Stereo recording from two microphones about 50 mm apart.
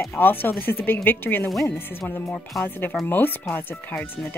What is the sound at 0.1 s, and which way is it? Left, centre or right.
A woman's voice, left.